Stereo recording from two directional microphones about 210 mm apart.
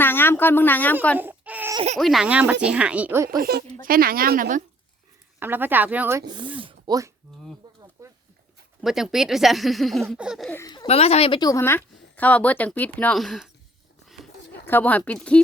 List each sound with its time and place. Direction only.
0.0 s speech: 10° left (ahead or behind)
1.2 s a sound: 10° right (ahead or behind)
1.7 s speech: 30° right (ahead or behind)
2.0 s speech: centre (ahead or behind)
3.2 s a woman's voice: 45° right (ahead or behind)
5.4 s speech: 10° right (ahead or behind)
7.6 s a sound: 15° right (ahead or behind)
8.0 s dog: 15° right (ahead or behind)
8.8 s speech: centre (ahead or behind)
10.5 s speech: 15° left (ahead or behind)
10.8 s a woman's voice: 30° left (ahead or behind); by 13.5 s centre (ahead or behind)
14.7 s a woman's voice: 10° left (ahead or behind)